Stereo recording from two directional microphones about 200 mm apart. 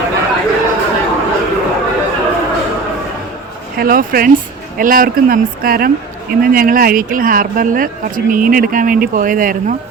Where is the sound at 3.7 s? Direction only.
45° right (ahead or behind).